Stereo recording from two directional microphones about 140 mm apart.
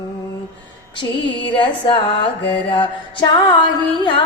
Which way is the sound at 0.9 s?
35° left (ahead or behind).